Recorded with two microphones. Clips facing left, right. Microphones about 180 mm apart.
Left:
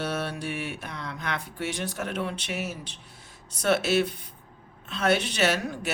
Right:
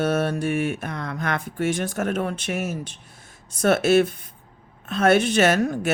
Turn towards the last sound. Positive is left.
turn(degrees=-50)  # may be behind; listen again after turning